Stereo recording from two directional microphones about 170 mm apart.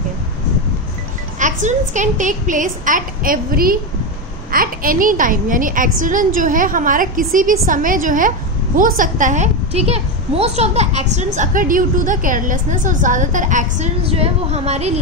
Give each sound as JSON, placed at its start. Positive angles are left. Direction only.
{"t": 1.4, "sound": "a woman's voice", "side_deg": -45}